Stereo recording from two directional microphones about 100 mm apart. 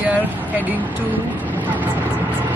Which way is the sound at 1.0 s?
15° right (ahead or behind).